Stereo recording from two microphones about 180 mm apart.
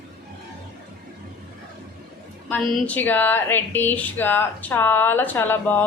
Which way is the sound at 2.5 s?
10° left (ahead or behind).